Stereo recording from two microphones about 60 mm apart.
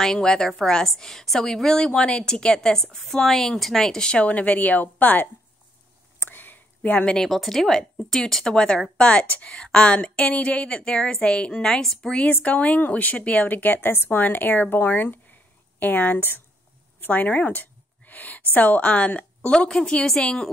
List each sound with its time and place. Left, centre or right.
0.0 s a woman's voice: centre
4.2 s a woman's voice: left
6.1 s a sound: left
7.2 s a woman's voice: centre
12.3 s a woman's voice: left